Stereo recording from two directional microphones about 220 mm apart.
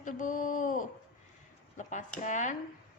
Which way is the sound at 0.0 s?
35° left (ahead or behind).